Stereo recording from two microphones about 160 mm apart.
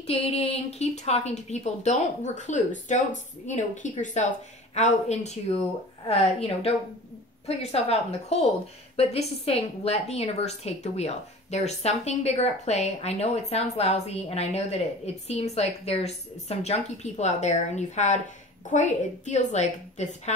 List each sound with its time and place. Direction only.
0.0 s a woman's voice: 40° left (ahead or behind)